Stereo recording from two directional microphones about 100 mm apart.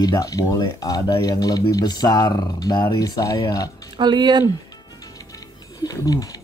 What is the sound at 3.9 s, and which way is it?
Speech, 45° right (ahead or behind).